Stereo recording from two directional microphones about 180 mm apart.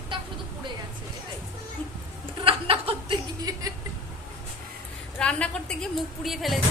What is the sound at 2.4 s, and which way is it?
Chuckle, 30° right (ahead or behind).